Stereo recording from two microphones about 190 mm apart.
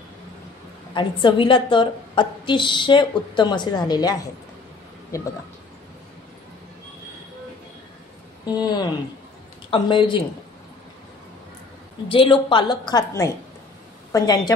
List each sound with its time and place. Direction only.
0.9 s a woman's voice: 25° left (ahead or behind)
8.5 s a woman's voice: 20° left (ahead or behind)
12.1 s a woman's voice: 25° left (ahead or behind)